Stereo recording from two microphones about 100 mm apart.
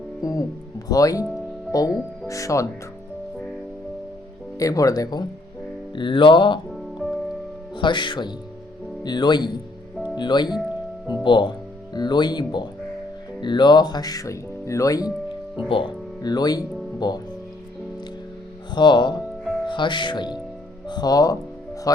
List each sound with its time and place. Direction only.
0.2 s speech: 35° left (ahead or behind)
4.5 s speech: 35° left (ahead or behind)
5.9 s music: 55° left (ahead or behind)
6.7 s music: centre (ahead or behind)
7.8 s speech: 50° left (ahead or behind)
15.5 s speech: 55° left (ahead or behind)
18.7 s speech: 50° left (ahead or behind)